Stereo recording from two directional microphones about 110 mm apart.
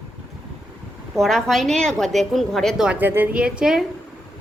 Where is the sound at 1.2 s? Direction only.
Centre (ahead or behind).